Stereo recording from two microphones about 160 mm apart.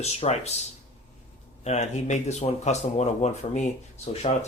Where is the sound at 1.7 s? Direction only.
45° left (ahead or behind).